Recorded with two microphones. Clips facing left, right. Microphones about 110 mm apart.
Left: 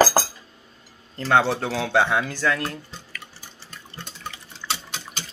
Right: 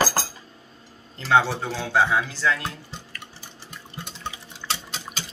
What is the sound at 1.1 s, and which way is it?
Speech, 45° left (ahead or behind).